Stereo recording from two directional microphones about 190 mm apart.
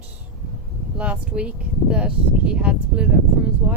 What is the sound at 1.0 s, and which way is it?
Speech, 5° right (ahead or behind).